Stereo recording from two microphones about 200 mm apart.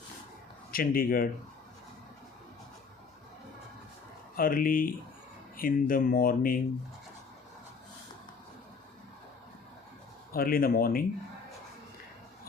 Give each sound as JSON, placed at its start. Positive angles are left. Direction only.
{"t": 0.7, "sound": "speech", "side_deg": 45}
{"t": 4.4, "sound": "speech", "side_deg": 45}
{"t": 10.3, "sound": "speech", "side_deg": 45}